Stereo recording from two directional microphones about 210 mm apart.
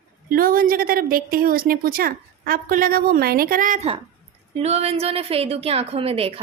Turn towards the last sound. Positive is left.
turn(degrees=-25)  # may be behind; listen again after turning